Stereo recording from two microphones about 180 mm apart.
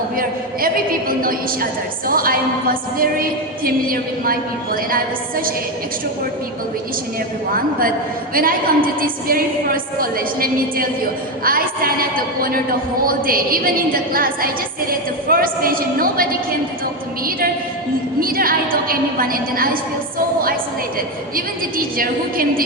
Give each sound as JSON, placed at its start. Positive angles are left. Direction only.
{"t": 0.2, "sound": "a woman's voice", "side_deg": -55}
{"t": 7.5, "sound": "a woman's voice", "side_deg": -55}
{"t": 18.2, "sound": "a woman's voice", "side_deg": -55}
{"t": 21.9, "sound": "a woman's voice", "side_deg": -55}